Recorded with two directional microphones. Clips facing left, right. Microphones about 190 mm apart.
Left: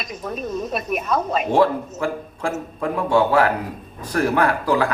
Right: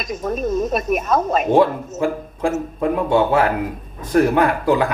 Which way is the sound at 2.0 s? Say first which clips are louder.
Right 4 dB; 20° right (ahead or behind).